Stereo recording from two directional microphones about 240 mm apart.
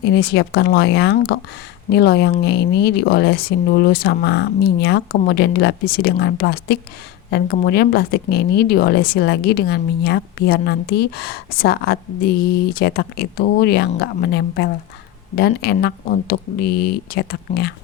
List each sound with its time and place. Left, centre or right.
0.0 s speech: left